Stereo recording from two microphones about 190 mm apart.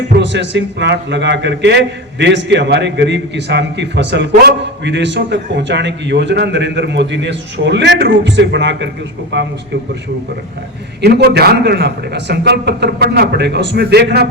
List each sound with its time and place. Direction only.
0.2 s a man's voice: 65° right (ahead or behind)
11.0 s a man's voice: 60° right (ahead or behind)